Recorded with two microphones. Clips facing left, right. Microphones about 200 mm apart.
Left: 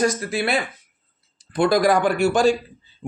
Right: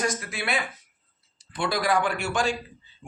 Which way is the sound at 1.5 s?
45° left (ahead or behind).